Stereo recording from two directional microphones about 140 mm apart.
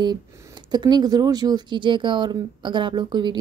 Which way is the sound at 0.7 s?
30° right (ahead or behind).